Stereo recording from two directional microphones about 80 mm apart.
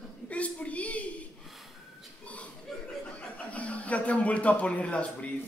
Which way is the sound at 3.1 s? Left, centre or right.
Centre.